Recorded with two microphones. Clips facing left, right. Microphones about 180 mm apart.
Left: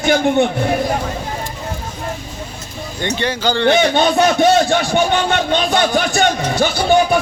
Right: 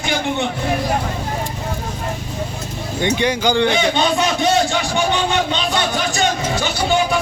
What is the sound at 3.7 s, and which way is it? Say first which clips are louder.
Speech: left 4 dB; 55° left (ahead or behind).